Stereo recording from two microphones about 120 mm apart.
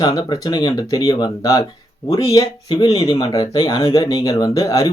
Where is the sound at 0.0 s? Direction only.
35° left (ahead or behind).